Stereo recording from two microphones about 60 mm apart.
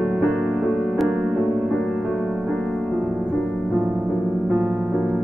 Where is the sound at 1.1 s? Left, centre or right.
Centre.